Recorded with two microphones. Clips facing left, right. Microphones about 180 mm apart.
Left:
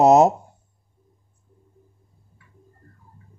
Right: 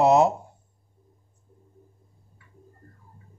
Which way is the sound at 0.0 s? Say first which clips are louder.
Left 4 dB; 40° left (ahead or behind).